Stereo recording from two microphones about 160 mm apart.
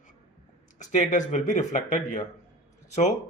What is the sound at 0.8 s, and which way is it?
Speech, 50° left (ahead or behind).